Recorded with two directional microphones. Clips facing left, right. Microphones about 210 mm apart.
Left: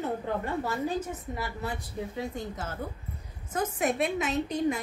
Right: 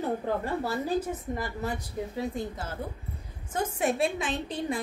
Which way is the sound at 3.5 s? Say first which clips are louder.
Even; 30° right (ahead or behind).